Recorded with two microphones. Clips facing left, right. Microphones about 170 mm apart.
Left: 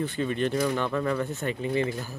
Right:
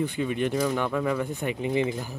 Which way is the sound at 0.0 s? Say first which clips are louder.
Right 1 dB; 15° right (ahead or behind).